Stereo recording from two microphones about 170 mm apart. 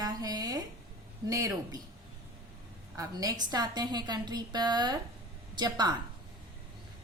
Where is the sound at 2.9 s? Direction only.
20° right (ahead or behind).